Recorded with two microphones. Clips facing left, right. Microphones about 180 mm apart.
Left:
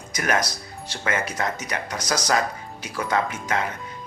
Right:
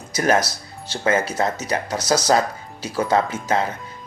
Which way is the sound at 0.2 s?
30° right (ahead or behind).